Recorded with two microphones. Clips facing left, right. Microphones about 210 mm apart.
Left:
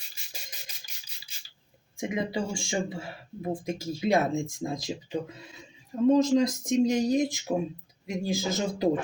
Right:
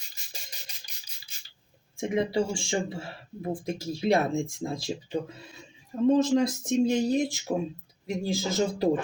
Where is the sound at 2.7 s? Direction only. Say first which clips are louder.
Right 1 dB; 15° left (ahead or behind).